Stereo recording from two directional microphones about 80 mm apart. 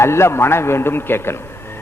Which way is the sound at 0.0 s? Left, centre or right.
Left.